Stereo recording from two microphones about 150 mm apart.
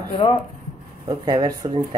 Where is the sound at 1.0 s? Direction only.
30° right (ahead or behind).